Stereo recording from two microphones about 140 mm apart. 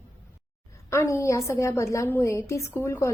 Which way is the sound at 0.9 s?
20° left (ahead or behind).